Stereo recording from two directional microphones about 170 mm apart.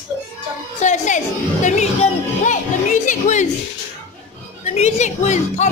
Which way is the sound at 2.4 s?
45° left (ahead or behind).